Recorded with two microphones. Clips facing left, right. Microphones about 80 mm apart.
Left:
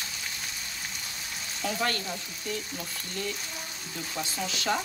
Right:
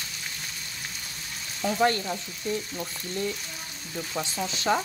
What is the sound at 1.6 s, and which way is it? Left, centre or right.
Frying, right.